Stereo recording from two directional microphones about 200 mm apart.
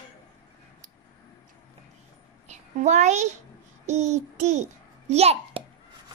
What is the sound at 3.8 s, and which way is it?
Child singing, 35° right (ahead or behind).